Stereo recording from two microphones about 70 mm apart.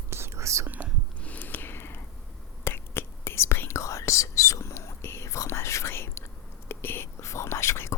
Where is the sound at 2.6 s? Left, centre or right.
Left.